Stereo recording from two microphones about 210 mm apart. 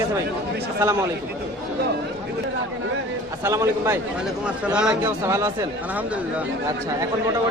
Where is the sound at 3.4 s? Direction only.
15° right (ahead or behind).